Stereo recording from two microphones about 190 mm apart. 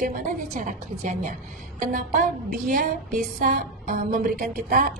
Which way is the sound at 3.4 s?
50° right (ahead or behind).